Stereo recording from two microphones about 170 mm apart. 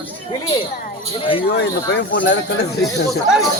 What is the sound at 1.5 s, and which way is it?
Speech, 90° left.